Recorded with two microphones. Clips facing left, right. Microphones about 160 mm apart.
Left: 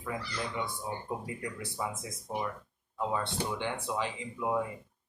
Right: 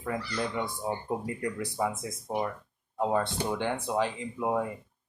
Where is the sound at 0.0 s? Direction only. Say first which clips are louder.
Right 5 dB; 50° right (ahead or behind).